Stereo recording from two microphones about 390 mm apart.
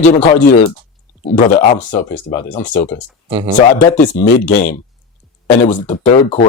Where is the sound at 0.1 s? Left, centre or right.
Centre.